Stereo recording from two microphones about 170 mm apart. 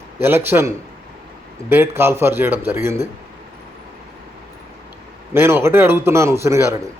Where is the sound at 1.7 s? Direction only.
15° right (ahead or behind).